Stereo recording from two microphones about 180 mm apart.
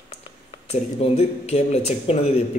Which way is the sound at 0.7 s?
35° left (ahead or behind).